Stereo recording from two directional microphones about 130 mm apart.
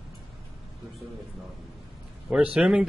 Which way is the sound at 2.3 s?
5° right (ahead or behind).